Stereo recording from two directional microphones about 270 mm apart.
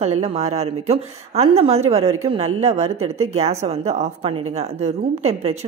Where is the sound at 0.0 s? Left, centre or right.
Right.